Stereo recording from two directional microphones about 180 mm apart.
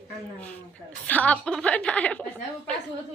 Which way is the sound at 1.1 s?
10° left (ahead or behind).